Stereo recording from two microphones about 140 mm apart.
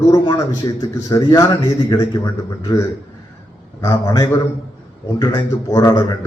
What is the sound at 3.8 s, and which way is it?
A man's voice, 25° left (ahead or behind).